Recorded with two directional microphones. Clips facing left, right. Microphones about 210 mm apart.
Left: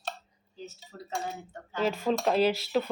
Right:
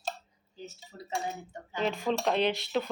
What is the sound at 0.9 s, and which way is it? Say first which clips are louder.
Speech: left 2 dB; 15° right (ahead or behind).